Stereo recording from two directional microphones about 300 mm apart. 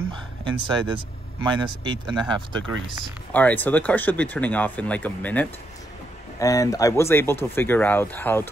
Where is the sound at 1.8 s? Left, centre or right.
Centre.